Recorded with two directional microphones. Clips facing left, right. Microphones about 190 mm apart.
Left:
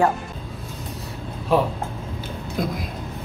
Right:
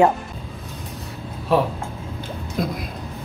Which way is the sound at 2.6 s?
Centre (ahead or behind).